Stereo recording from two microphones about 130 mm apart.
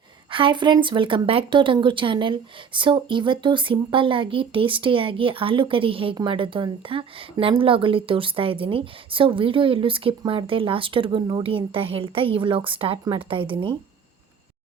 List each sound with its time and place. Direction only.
0.3 s a woman's voice: 40° right (ahead or behind)